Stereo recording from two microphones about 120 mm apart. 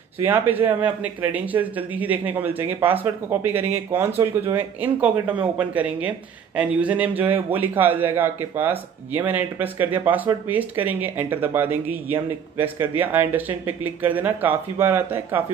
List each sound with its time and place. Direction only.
0.2 s speech: 15° right (ahead or behind)